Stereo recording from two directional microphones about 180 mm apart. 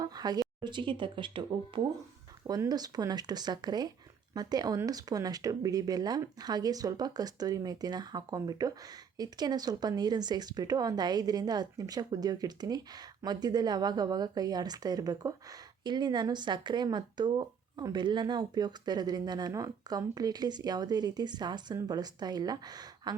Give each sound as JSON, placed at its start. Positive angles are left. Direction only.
{"t": 0.0, "sound": "speech", "side_deg": -20}